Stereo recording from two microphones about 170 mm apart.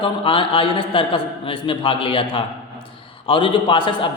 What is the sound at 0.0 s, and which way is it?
A man's voice, 30° left (ahead or behind).